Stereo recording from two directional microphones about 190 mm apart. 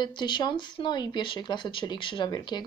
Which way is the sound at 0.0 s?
25° left (ahead or behind).